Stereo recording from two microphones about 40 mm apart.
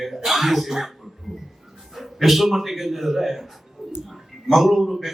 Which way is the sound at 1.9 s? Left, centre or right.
Centre.